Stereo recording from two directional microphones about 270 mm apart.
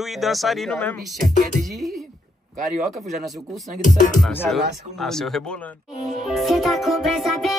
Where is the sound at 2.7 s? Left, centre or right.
Right.